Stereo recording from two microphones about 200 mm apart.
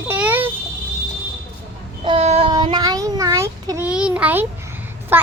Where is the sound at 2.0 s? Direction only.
30° right (ahead or behind); by 5.2 s 10° right (ahead or behind).